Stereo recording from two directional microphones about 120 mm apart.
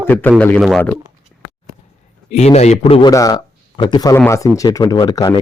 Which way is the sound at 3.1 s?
30° left (ahead or behind).